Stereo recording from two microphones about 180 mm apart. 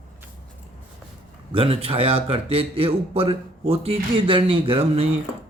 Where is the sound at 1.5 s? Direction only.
35° right (ahead or behind).